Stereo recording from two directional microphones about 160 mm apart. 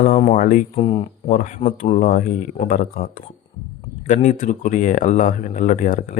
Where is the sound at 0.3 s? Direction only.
60° left (ahead or behind).